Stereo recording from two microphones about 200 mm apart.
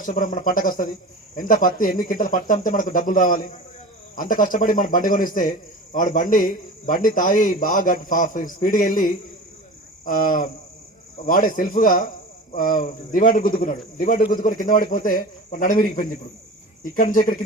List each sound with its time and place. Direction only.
0.0 s a man's voice: 40° left (ahead or behind)
10.1 s a man's voice: 40° left (ahead or behind)